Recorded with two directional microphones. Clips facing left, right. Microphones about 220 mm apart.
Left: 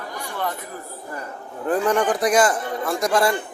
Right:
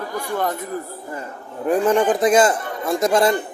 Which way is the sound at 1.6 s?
20° right (ahead or behind).